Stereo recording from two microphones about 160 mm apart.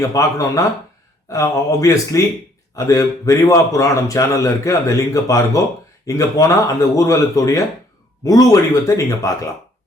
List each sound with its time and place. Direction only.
0.0 s speech: 20° left (ahead or behind)